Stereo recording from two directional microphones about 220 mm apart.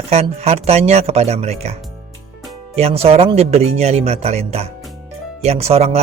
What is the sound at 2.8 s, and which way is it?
Speech, 25° right (ahead or behind).